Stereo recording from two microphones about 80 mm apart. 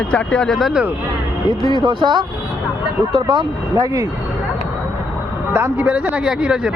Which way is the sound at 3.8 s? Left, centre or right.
Right.